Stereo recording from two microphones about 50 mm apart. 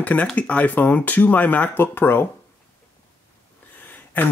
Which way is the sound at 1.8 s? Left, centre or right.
Left.